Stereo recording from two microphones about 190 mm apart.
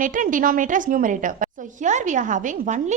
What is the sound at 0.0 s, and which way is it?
A woman's voice, 45° right (ahead or behind).